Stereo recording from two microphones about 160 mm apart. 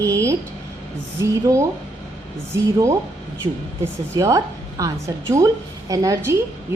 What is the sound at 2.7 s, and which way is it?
Speech, 20° right (ahead or behind).